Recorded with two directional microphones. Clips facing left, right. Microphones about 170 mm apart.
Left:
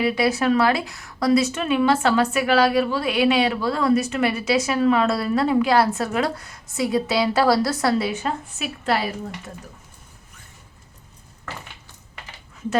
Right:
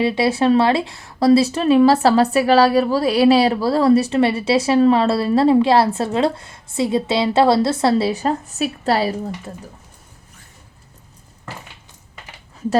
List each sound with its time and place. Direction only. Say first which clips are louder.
0.0 s speech: right 3 dB; 30° right (ahead or behind)